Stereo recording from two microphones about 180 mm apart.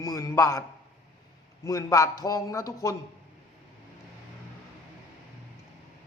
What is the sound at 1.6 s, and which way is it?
A man's voice, 20° left (ahead or behind).